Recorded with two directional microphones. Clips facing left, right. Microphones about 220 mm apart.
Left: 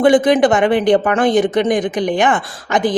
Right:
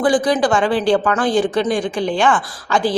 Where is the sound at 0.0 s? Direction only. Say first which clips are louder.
Left 5 dB; 20° left (ahead or behind).